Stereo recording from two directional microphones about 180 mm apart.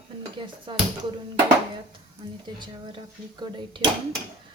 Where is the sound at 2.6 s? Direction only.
25° right (ahead or behind).